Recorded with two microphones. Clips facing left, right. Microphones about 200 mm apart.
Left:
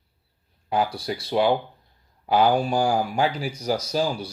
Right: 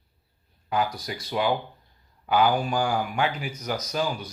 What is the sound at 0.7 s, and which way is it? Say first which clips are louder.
Speech: left 3 dB; 30° left (ahead or behind).